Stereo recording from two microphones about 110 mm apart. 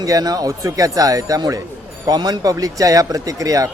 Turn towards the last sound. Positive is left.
turn(degrees=-30)  # may be behind; listen again after turning